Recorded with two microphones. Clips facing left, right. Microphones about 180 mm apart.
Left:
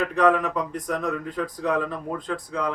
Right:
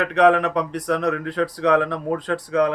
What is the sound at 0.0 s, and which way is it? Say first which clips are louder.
Speech: right 4 dB; 75° right (ahead or behind).